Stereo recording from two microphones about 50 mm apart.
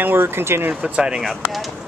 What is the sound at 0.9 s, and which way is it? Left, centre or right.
Speech, centre.